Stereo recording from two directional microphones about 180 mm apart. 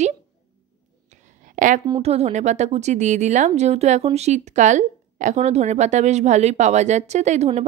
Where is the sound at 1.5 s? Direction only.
45° right (ahead or behind).